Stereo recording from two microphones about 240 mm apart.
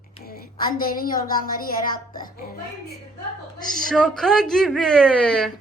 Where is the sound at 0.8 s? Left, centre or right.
Left.